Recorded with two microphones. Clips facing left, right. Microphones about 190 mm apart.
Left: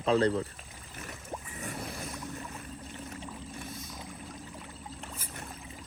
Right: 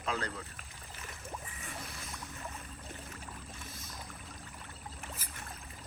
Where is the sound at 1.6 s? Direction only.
60° left (ahead or behind).